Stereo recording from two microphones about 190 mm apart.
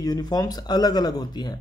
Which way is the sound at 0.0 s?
20° left (ahead or behind).